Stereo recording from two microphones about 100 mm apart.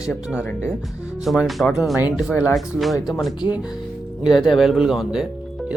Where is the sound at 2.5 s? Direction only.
Centre (ahead or behind).